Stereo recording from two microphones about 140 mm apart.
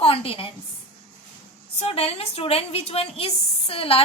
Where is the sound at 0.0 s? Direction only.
40° left (ahead or behind).